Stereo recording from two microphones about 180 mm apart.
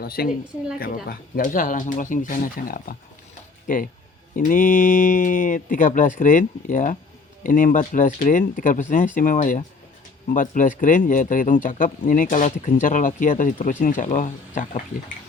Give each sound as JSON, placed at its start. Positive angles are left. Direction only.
{"t": 0.0, "sound": "a woman's voice", "side_deg": 60}